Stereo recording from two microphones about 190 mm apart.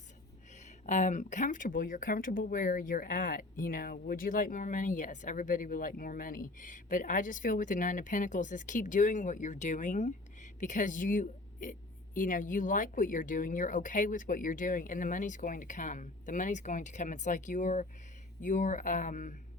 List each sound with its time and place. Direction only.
0.5 s speech: 40° left (ahead or behind)